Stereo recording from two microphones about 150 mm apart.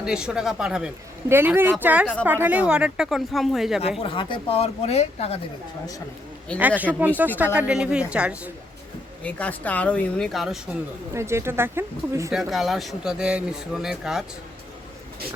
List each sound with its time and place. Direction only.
0.0 s speech: 5° right (ahead or behind)
4.0 s speech: 35° left (ahead or behind)
6.6 s speech: 10° right (ahead or behind)
9.2 s speech: 10° left (ahead or behind)
11.1 s speech: 20° right (ahead or behind)
12.3 s speech: centre (ahead or behind)